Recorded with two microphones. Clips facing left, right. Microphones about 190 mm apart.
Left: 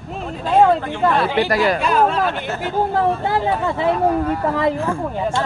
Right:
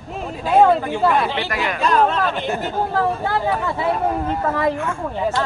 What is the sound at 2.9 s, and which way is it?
Speech, 20° left (ahead or behind).